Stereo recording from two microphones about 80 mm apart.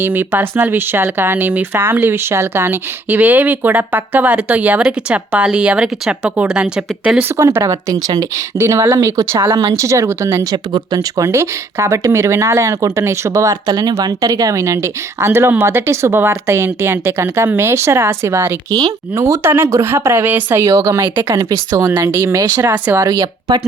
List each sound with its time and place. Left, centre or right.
0.0 s speech: right
3.1 s speech: right
7.6 s speech: right
8.5 s speech: right
10.5 s speech: right
11.2 s speech: right
18.7 s speech: right
19.1 s speech: right
20.7 s speech: right
21.2 s speech: right
23.0 s speech: right